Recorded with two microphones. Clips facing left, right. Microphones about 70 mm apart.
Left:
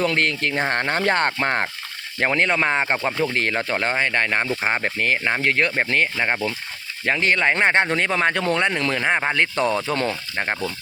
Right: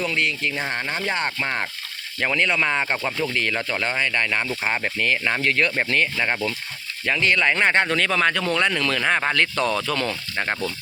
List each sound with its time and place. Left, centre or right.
0.0 s speech: left
3.3 s speech: left
6.1 s speech: centre
7.0 s speech: left
10.4 s speech: centre